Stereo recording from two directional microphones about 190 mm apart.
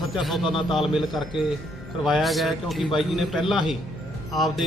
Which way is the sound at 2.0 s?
Centre (ahead or behind).